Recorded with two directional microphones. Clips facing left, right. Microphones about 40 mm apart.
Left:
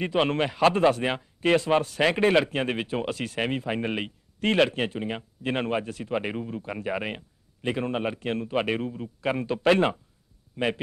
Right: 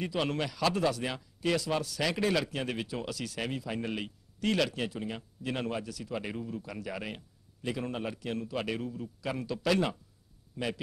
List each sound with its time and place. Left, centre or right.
0.0 s speech: left